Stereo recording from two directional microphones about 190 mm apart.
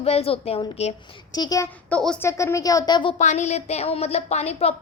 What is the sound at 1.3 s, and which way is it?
Speech, 20° left (ahead or behind).